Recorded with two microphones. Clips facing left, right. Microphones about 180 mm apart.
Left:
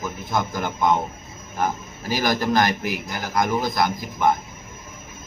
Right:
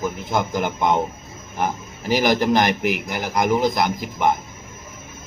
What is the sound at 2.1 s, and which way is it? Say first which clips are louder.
Speech: right 4 dB; 20° right (ahead or behind).